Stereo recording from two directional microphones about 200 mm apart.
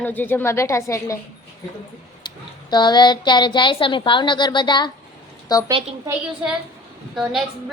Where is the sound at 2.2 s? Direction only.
20° left (ahead or behind).